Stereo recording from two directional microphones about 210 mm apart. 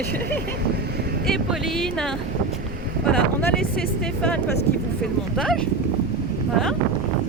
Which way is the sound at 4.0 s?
5° left (ahead or behind).